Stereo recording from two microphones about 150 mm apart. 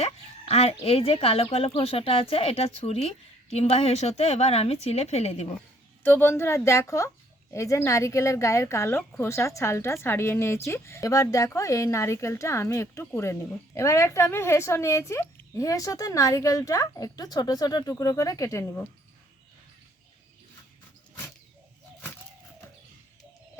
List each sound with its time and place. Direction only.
0.0 s speech: 45° left (ahead or behind)
6.0 s a woman's voice: 15° left (ahead or behind)